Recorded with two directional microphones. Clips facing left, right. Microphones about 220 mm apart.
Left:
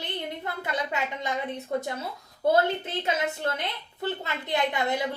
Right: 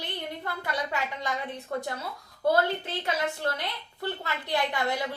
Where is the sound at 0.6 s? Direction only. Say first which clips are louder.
Left 1 dB; 20° left (ahead or behind).